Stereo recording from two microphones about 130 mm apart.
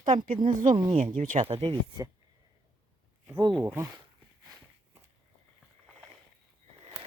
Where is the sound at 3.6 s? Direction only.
20° right (ahead or behind).